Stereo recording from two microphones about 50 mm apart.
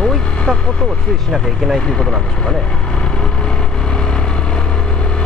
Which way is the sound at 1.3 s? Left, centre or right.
Centre.